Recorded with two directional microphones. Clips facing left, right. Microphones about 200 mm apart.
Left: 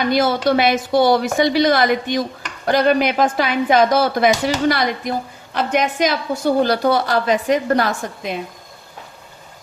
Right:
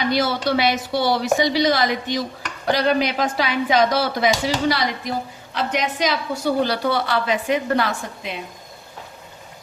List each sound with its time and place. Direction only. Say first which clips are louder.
0.0 s a woman's voice: left 4 dB; 50° left (ahead or behind)